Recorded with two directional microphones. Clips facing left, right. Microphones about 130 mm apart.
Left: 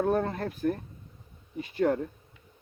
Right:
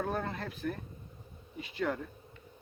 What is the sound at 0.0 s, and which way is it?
Speech, 40° left (ahead or behind).